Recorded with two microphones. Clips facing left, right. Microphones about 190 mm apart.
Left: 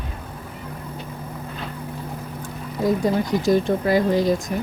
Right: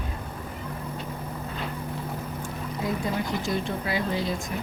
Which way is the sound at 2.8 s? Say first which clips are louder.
Left 9 dB; 40° left (ahead or behind).